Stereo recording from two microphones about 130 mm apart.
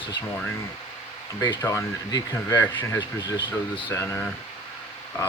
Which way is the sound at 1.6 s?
25° left (ahead or behind).